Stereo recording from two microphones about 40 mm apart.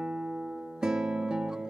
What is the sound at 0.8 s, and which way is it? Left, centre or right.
Music, centre.